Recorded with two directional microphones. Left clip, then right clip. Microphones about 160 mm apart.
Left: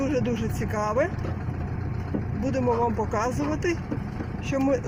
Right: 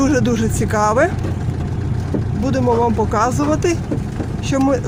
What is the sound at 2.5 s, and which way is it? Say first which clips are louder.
Speech: right 8 dB; 5° right (ahead or behind).